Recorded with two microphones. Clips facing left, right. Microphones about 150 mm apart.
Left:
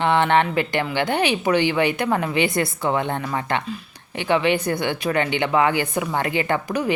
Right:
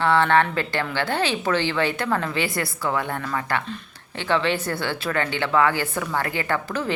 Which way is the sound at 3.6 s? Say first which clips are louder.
Left 3 dB; 10° left (ahead or behind).